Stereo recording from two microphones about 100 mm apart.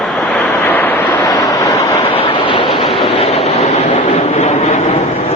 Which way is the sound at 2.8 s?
65° left (ahead or behind).